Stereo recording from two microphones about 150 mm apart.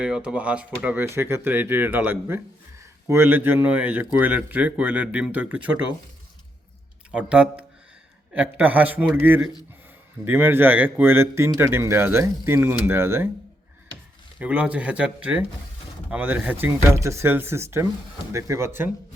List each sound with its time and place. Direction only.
0.0 s speech: 5° right (ahead or behind)
7.1 s speech: 5° right (ahead or behind)
14.3 s speech: 10° right (ahead or behind)